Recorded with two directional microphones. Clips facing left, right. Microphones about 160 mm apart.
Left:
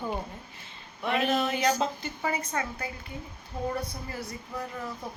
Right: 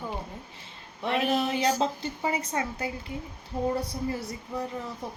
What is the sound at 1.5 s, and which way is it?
A woman's voice, 30° right (ahead or behind).